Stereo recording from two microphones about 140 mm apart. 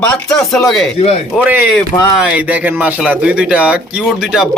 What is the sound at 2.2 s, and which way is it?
Speech, 10° right (ahead or behind).